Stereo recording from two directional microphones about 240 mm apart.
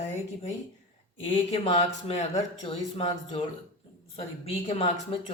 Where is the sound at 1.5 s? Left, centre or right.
Left.